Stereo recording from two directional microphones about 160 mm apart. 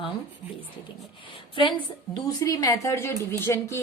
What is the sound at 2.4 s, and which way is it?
A woman's voice, 20° left (ahead or behind).